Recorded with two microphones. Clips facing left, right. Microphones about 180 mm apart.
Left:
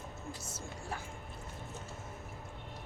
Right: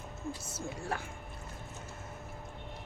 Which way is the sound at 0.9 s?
65° right (ahead or behind).